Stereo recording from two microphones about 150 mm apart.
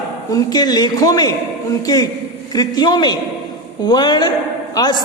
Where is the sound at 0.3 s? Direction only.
25° left (ahead or behind).